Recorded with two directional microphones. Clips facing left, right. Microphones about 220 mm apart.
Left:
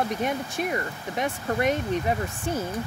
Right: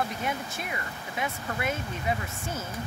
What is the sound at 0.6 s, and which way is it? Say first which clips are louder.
Speech: left 8 dB; 40° left (ahead or behind).